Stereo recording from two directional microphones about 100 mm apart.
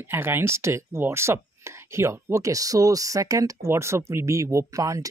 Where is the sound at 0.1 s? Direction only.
25° right (ahead or behind).